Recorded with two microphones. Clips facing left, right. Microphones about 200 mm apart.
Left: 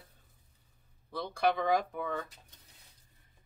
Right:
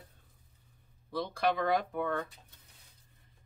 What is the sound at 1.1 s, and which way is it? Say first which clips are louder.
Speech: even; centre (ahead or behind).